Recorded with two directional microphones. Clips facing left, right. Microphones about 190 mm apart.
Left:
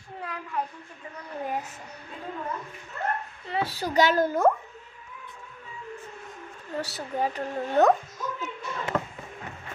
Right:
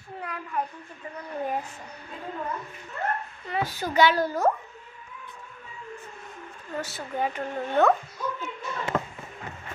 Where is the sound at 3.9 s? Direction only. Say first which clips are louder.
Even; 45° left (ahead or behind).